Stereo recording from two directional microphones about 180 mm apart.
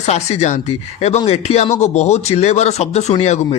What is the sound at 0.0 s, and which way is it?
Speech, 35° left (ahead or behind).